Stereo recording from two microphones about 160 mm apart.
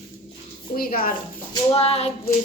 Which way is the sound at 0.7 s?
65° left (ahead or behind).